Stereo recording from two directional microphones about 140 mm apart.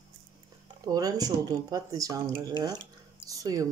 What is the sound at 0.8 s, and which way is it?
Speech, 25° right (ahead or behind).